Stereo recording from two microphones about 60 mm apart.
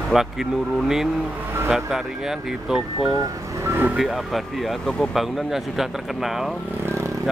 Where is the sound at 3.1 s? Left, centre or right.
Right.